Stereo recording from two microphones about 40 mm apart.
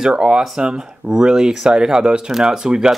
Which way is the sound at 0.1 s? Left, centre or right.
Right.